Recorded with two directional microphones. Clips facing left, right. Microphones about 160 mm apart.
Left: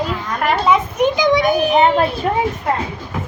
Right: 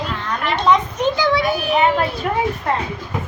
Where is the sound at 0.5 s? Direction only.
5° left (ahead or behind).